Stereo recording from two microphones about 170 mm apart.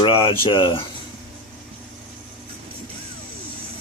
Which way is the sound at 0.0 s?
30° left (ahead or behind).